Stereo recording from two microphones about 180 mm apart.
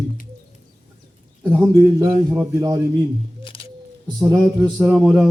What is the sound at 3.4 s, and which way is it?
Music, 30° left (ahead or behind).